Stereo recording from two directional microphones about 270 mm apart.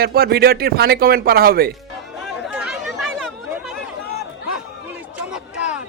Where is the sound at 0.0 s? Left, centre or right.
Right.